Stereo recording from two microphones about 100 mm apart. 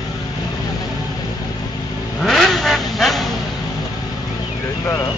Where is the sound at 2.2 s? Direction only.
Centre (ahead or behind).